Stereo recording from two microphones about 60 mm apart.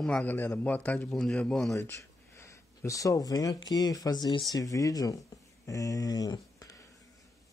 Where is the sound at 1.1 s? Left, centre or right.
Centre.